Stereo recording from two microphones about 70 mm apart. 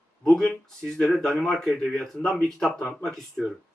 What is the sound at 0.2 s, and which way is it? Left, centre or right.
Speech, centre.